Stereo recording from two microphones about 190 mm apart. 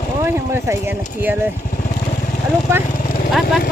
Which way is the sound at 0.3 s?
10° right (ahead or behind).